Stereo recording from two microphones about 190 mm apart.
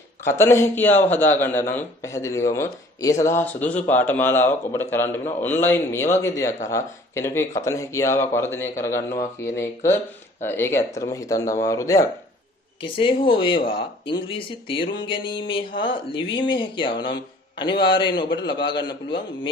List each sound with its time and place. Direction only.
0.2 s speech: 15° left (ahead or behind)